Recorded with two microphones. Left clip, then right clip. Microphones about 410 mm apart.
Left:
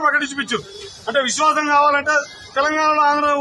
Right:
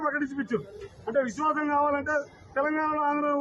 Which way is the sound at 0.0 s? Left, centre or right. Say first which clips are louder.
Left 11 dB; right.